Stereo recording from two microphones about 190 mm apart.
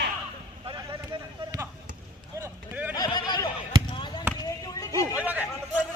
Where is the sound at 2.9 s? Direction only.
20° left (ahead or behind).